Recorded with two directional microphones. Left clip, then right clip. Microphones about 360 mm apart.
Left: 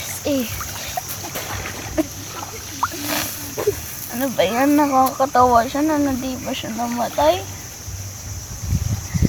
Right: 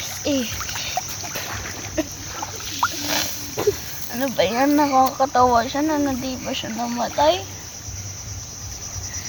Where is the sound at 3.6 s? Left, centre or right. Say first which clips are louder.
Even; right.